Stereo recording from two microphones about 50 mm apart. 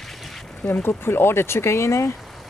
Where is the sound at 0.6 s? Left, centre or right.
Left.